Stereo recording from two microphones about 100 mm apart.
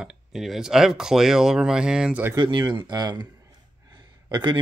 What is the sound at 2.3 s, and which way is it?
Speech, 45° right (ahead or behind).